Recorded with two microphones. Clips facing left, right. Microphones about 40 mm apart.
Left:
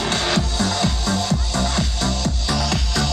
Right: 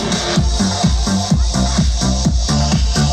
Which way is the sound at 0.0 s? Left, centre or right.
Centre.